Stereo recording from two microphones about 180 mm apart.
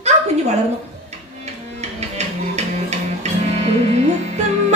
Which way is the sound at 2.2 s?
40° right (ahead or behind).